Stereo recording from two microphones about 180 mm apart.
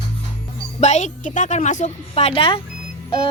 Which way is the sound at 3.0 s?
30° left (ahead or behind).